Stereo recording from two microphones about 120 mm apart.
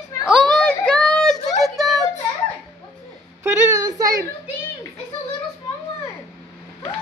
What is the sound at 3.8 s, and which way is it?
Whimper, 30° right (ahead or behind).